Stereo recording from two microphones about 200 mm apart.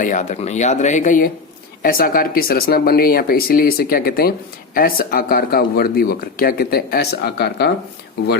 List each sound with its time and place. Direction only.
0.0 s speech: 40° left (ahead or behind); by 7.7 s 55° left (ahead or behind)